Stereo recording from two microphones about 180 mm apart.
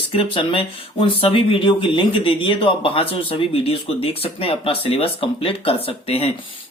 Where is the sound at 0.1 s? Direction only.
30° left (ahead or behind).